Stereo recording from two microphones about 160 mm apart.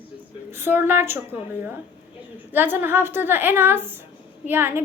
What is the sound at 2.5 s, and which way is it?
A woman's voice, 10° right (ahead or behind).